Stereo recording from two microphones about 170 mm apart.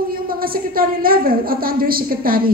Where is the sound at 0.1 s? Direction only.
60° right (ahead or behind).